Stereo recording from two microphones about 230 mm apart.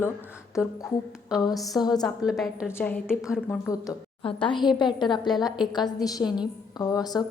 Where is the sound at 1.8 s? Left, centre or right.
Centre.